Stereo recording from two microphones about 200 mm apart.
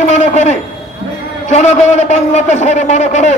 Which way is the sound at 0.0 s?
35° left (ahead or behind).